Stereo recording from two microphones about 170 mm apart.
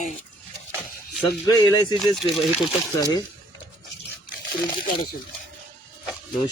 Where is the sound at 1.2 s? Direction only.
20° left (ahead or behind).